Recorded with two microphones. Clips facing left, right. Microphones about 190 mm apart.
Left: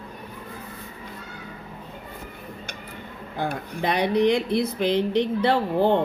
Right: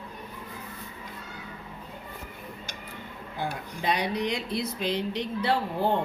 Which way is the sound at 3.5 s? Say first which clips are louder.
Left 3 dB; 60° left (ahead or behind).